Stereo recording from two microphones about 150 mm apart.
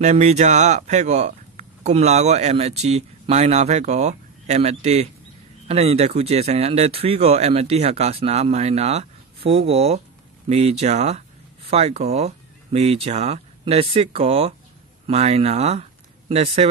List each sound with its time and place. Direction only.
0.0 s speech: 50° right (ahead or behind)